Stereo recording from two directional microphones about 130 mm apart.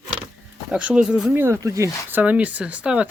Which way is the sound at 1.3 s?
15° right (ahead or behind).